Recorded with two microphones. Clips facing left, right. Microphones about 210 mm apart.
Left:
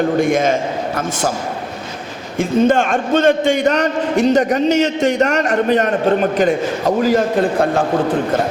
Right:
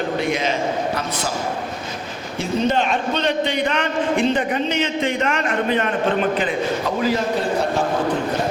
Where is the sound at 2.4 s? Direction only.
50° left (ahead or behind).